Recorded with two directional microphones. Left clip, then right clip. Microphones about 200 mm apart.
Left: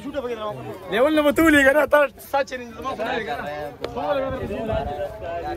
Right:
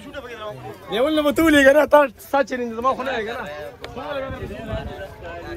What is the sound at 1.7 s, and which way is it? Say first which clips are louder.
Speech: right 3 dB; 40° right (ahead or behind).